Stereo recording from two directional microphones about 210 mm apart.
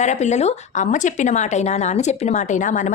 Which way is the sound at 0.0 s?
35° left (ahead or behind).